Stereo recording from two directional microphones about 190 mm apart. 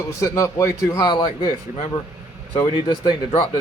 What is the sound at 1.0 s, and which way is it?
Speech, 25° left (ahead or behind).